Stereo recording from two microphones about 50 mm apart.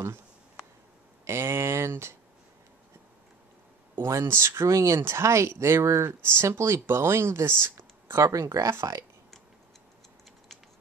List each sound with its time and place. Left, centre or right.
1.2 s speech: right
4.0 s speech: right
4.3 s speech: right
5.0 s speech: right
7.7 s speech: right